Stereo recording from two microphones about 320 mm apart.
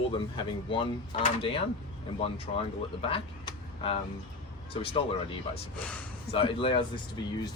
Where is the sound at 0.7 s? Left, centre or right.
Centre.